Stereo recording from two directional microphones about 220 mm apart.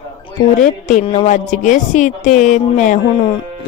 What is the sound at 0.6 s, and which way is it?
A woman's voice, 35° left (ahead or behind).